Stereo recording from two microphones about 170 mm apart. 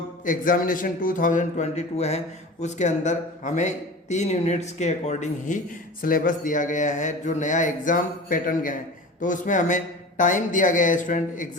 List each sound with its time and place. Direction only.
0.3 s a man's voice: 55° left (ahead or behind)
6.0 s a man's voice: 55° left (ahead or behind)